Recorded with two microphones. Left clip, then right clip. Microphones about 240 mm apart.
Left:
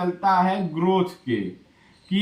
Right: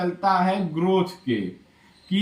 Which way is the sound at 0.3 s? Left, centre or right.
Centre.